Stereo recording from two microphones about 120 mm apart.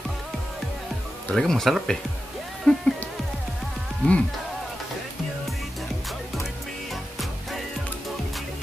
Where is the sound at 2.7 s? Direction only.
5° left (ahead or behind).